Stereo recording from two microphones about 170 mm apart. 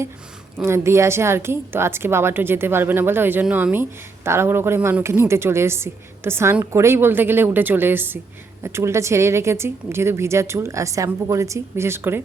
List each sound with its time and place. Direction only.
0.6 s a woman's voice: 15° right (ahead or behind)